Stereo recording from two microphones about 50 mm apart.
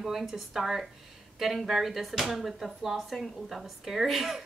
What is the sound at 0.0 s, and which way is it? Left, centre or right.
A woman's voice, centre.